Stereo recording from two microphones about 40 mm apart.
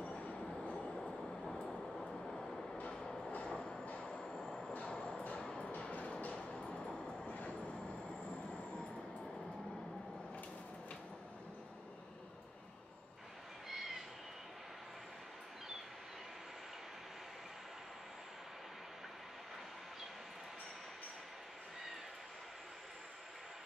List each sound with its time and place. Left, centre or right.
0.0 s train: left
0.6 s train: centre
4.8 s train: left
5.2 s a sound: left
5.7 s a sound: left
6.3 s vehicle: left
7.2 s train: left
13.7 s owl: centre